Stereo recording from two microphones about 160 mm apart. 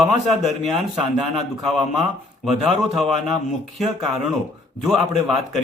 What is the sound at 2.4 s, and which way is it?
Speech, centre (ahead or behind).